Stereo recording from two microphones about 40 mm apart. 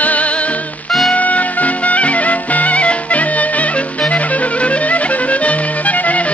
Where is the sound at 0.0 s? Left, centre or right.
Left.